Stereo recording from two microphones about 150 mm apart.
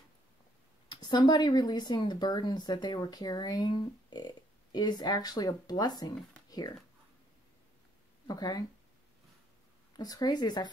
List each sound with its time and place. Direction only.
0.8 s speech: 30° left (ahead or behind)
8.3 s speech: 25° left (ahead or behind)
9.9 s speech: 25° left (ahead or behind)